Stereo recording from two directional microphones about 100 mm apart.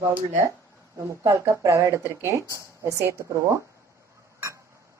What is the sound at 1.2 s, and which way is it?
Speech, 30° right (ahead or behind).